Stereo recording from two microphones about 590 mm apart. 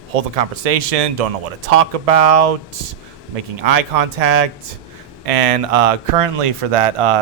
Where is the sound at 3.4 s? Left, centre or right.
Right.